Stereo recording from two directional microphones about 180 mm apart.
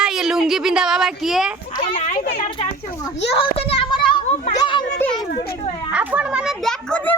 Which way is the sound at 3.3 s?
30° left (ahead or behind).